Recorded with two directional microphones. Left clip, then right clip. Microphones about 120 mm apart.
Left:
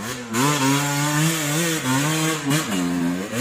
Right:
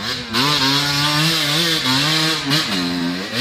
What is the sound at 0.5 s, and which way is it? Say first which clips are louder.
Wood: right 4 dB; 5° left (ahead or behind).